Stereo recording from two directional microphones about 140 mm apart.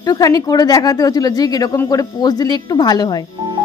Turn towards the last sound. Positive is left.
turn(degrees=30)  # may be behind; listen again after turning